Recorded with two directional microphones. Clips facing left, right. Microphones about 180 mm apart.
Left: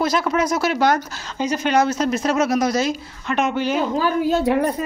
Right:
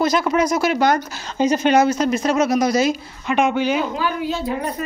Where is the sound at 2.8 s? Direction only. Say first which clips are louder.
Right 3 dB; 10° right (ahead or behind).